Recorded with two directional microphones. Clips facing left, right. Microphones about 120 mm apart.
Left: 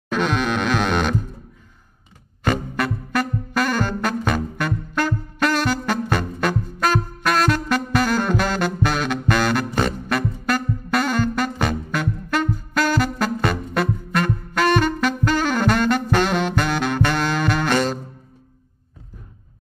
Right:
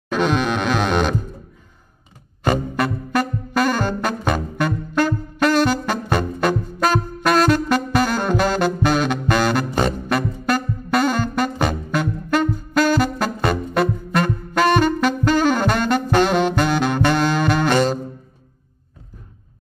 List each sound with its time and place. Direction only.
0.1 s music: 15° right (ahead or behind)
2.4 s saxophone: 25° right (ahead or behind)